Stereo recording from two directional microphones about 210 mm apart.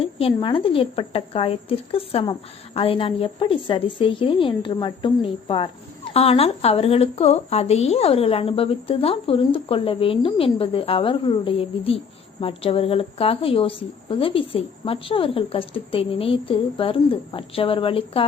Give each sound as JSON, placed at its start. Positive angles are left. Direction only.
{"t": 0.0, "sound": "a woman's voice", "side_deg": 25}